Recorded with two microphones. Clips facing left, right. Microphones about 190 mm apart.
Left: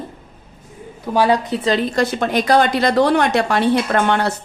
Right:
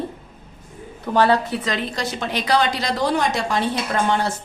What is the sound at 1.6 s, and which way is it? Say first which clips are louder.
Speech: left 7 dB; 30° left (ahead or behind).